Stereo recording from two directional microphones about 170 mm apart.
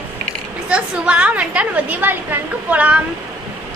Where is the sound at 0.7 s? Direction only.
5° right (ahead or behind).